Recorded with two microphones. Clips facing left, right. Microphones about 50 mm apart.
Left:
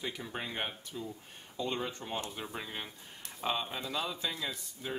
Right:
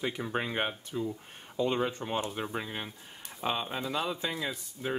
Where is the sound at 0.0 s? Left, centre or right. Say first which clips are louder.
Right 6 dB; right.